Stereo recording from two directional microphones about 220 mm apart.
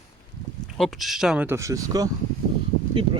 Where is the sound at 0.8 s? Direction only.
Centre (ahead or behind).